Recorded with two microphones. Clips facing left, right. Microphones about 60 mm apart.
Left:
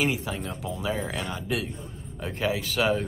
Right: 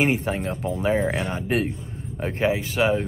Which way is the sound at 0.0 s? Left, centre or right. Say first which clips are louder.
Right 5 dB; right.